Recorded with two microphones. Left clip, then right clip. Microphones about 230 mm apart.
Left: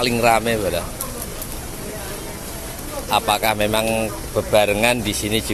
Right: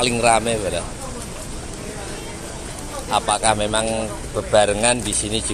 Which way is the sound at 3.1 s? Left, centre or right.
Centre.